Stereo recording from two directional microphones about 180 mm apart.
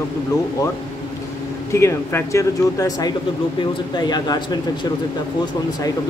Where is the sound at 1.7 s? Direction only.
15° left (ahead or behind).